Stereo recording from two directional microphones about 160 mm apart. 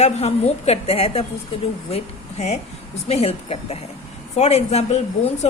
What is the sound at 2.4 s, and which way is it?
A woman's voice, 45° left (ahead or behind).